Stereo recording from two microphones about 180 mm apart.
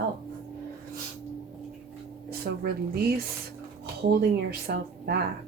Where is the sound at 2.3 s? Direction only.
60° right (ahead or behind).